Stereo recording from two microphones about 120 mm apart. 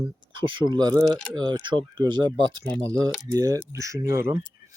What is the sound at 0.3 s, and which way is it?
Speech, 40° right (ahead or behind).